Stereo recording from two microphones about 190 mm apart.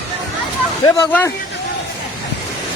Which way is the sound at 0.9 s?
15° left (ahead or behind).